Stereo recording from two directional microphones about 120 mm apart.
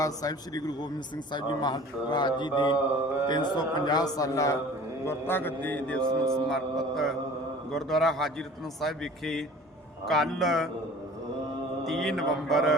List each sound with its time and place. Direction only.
0.0 s a man's voice: 30° left (ahead or behind)
5.0 s a man's voice: 15° left (ahead or behind); by 10.7 s centre (ahead or behind)
11.9 s a man's voice: centre (ahead or behind)